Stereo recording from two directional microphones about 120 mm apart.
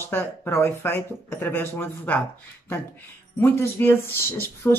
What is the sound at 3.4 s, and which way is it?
Speech, 20° left (ahead or behind).